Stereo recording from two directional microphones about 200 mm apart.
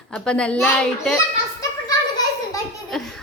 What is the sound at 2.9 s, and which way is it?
Laughter, centre (ahead or behind).